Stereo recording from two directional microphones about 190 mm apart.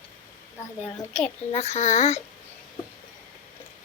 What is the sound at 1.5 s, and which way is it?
Speech, 35° left (ahead or behind).